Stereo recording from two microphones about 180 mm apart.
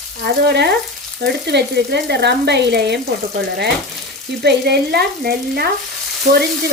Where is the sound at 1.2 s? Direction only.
65° right (ahead or behind).